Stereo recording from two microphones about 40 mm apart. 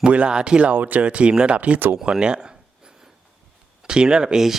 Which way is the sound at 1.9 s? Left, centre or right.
Centre.